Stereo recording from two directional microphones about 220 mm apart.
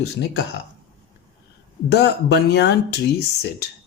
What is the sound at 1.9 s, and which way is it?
Speech, 50° left (ahead or behind).